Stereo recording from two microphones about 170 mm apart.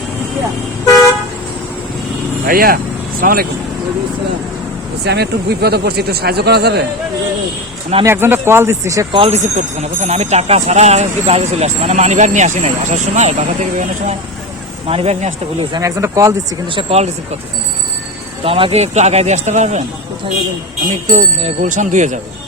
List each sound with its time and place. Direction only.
2.5 s speech: 60° right (ahead or behind)
5.0 s speech: 75° right (ahead or behind)
8.0 s a man's voice: 15° right (ahead or behind)
9.1 s speech: 30° right (ahead or behind)
9.4 s speech: 45° right (ahead or behind)
15.8 s a man's voice: 20° right (ahead or behind)
16.6 s speech: 35° right (ahead or behind)
18.4 s speech: 35° right (ahead or behind)
21.1 s speech: 50° right (ahead or behind)